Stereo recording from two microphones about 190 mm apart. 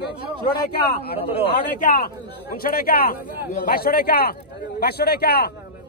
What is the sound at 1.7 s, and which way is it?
Speech, 45° left (ahead or behind).